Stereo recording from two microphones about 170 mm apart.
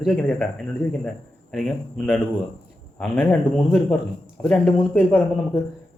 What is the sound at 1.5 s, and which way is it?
A man's voice, 5° left (ahead or behind).